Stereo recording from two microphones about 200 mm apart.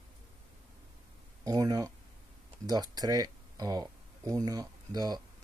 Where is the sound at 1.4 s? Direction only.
20° right (ahead or behind).